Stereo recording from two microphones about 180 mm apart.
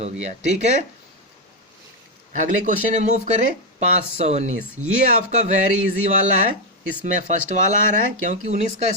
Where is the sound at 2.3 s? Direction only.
45° right (ahead or behind).